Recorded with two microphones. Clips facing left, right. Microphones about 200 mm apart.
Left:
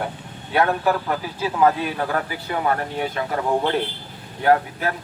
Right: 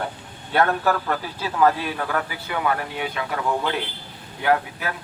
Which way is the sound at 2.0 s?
35° left (ahead or behind).